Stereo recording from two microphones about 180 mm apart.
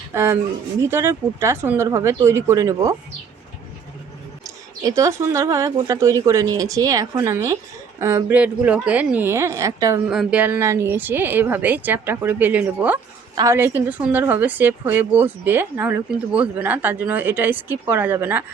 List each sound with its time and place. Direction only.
0.1 s a woman's voice: 15° right (ahead or behind)
4.4 s a woman's voice: 20° right (ahead or behind)
10.1 s a woman's voice: 5° right (ahead or behind)